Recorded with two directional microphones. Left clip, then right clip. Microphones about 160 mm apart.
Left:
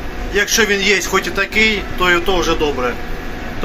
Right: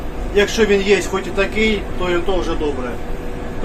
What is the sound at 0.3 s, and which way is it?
A man's voice, 5° right (ahead or behind).